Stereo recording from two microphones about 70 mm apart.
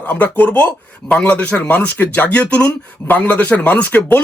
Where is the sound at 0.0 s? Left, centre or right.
Left.